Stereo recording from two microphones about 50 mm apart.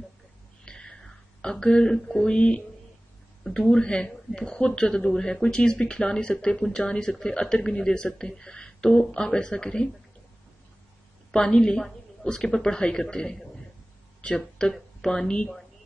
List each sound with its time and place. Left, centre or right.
0.7 s a sound: centre
2.2 s a woman's voice: centre
11.3 s a woman's voice: centre
14.6 s speech: centre